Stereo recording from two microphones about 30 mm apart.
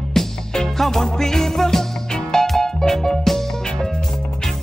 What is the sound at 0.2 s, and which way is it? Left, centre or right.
Music, centre.